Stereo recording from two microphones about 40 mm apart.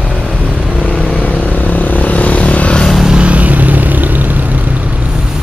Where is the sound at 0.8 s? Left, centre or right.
Left.